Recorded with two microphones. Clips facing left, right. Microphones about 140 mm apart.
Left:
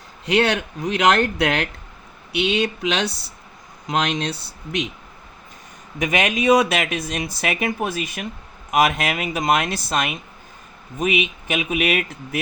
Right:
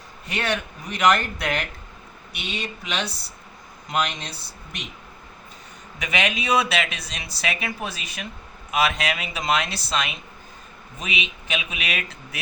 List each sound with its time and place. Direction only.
0.3 s speech: 75° left (ahead or behind)
6.0 s speech: 45° left (ahead or behind)